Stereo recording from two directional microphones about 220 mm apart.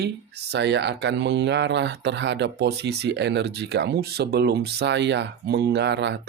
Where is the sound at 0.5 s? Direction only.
50° right (ahead or behind).